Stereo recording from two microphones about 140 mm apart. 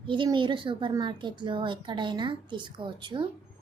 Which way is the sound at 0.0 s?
35° right (ahead or behind).